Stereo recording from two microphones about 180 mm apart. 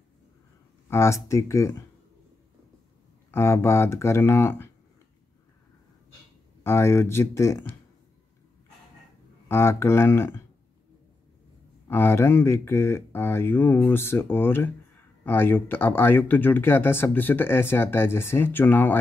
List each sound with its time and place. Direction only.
0.8 s speech: 15° left (ahead or behind)
3.3 s speech: 15° left (ahead or behind)
6.6 s speech: 15° left (ahead or behind)
9.5 s speech: 15° left (ahead or behind)
11.9 s speech: 15° left (ahead or behind)